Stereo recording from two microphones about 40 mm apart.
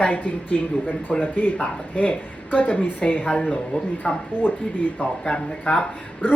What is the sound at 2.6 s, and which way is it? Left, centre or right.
A woman's voice, left.